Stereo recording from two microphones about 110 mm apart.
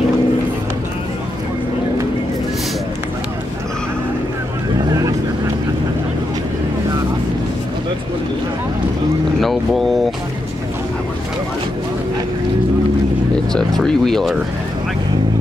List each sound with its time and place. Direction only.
4.7 s vehicle: 30° right (ahead or behind)
9.4 s boat: centre (ahead or behind)
13.5 s a sound: 5° left (ahead or behind)